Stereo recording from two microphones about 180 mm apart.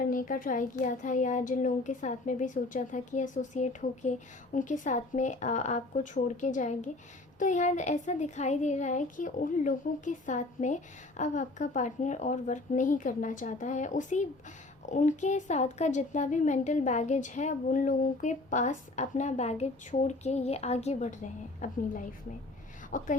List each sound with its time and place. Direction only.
0.0 s a woman's voice: 50° left (ahead or behind)